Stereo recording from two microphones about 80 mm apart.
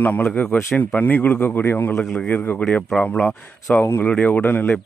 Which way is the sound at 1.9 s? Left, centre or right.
Centre.